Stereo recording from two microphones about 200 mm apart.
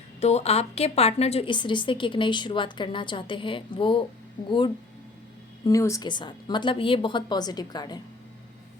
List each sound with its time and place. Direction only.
0.2 s a woman's voice: 35° left (ahead or behind)